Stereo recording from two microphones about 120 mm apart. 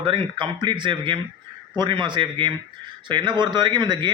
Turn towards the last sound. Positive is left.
turn(degrees=-40)  # may be behind; listen again after turning